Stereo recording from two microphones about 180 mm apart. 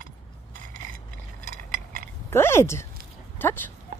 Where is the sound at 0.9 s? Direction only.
50° right (ahead or behind).